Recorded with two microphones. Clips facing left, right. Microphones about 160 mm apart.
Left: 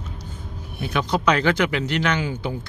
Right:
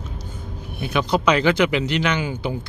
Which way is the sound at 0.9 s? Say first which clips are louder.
Right 2 dB; 15° right (ahead or behind).